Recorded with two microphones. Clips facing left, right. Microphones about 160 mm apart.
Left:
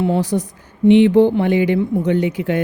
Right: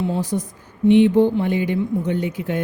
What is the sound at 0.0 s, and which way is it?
Speech, 75° left (ahead or behind).